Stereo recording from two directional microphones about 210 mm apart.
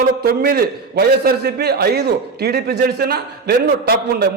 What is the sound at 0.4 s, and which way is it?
A man's voice, 45° right (ahead or behind).